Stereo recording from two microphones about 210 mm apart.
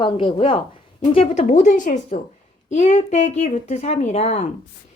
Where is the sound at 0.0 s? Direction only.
25° left (ahead or behind).